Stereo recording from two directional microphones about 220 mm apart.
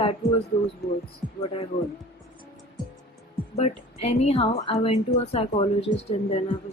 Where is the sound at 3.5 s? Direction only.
30° left (ahead or behind).